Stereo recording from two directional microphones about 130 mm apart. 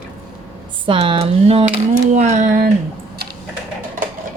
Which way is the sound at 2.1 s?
65° right (ahead or behind).